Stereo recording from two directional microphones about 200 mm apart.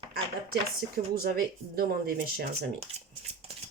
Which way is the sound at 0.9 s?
50° right (ahead or behind).